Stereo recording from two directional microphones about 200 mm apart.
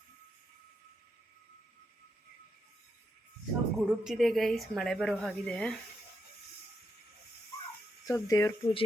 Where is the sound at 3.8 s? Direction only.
Centre (ahead or behind).